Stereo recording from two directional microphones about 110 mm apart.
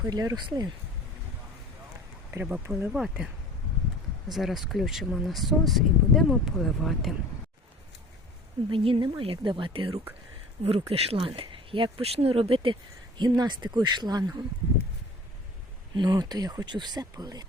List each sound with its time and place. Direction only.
0.0 s speech: 35° right (ahead or behind)
2.3 s speech: 20° right (ahead or behind)
2.9 s speech: 5° right (ahead or behind)
4.3 s speech: centre (ahead or behind)
8.7 s speech: 50° right (ahead or behind)
13.1 s speech: 40° right (ahead or behind)
16.0 s speech: 40° right (ahead or behind)